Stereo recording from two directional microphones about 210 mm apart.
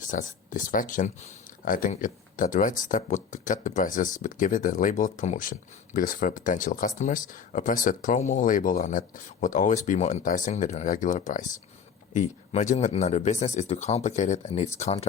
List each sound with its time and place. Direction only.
0.1 s speech: 40° left (ahead or behind)